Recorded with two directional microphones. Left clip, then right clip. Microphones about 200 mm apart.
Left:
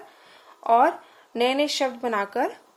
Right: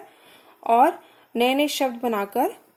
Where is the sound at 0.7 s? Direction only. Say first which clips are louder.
Right 1 dB; 45° right (ahead or behind).